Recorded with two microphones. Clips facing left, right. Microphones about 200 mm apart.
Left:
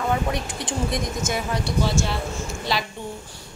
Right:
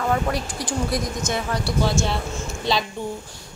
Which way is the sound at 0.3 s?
Centre (ahead or behind).